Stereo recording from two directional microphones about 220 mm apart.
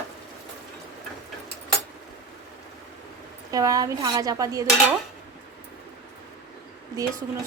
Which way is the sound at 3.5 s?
15° right (ahead or behind).